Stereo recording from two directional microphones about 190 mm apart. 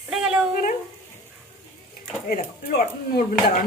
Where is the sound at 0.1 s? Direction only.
5° right (ahead or behind).